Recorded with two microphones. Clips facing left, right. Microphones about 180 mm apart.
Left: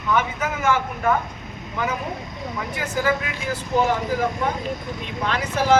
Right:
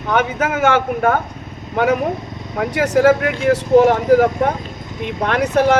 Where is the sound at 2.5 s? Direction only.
80° right.